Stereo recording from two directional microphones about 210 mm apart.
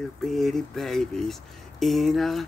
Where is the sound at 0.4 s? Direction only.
Centre (ahead or behind).